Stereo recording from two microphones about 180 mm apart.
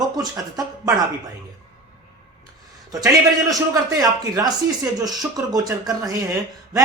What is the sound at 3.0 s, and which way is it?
Speech, 20° right (ahead or behind).